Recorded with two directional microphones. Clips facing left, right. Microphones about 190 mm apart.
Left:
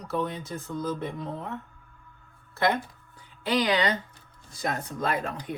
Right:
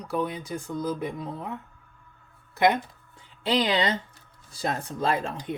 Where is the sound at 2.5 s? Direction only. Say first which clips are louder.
Right 3 dB; 15° right (ahead or behind).